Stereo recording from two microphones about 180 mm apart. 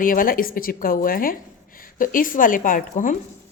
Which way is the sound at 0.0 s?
50° left (ahead or behind).